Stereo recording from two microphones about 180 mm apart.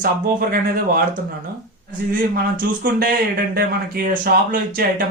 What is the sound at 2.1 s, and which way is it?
Speech, 55° right (ahead or behind).